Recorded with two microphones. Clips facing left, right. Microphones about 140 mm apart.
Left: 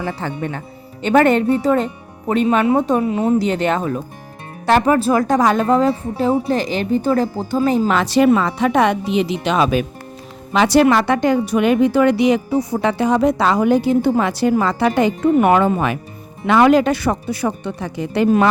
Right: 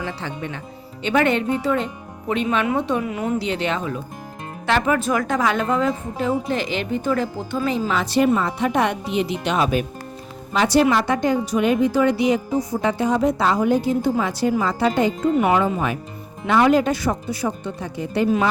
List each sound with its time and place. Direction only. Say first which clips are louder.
0.0 s a woman's voice: left 5 dB; 50° left (ahead or behind)
3.0 s a woman's voice: left 7 dB; 30° left (ahead or behind)
3.3 s a woman's voice: left 6 dB; 45° left (ahead or behind)
7.9 s a woman's voice: left 3 dB; 85° left
10.5 s a woman's voice: left 4 dB; 80° left
15.4 s a woman's voice: left 5 dB; 60° left (ahead or behind); by 18.3 s 80° left